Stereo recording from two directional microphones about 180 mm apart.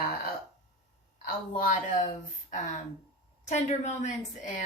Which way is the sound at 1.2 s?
50° left (ahead or behind).